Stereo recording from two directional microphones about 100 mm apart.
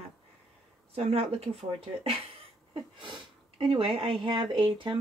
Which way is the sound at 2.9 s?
55° right (ahead or behind).